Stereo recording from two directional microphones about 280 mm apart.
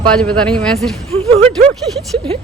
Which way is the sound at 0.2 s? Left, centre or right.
Centre.